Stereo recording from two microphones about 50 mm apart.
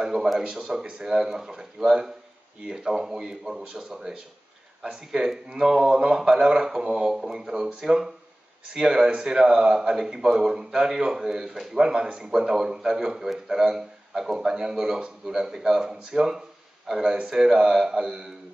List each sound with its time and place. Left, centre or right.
0.0 s a man's voice: centre